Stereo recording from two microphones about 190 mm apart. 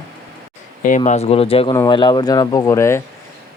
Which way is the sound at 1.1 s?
35° left (ahead or behind).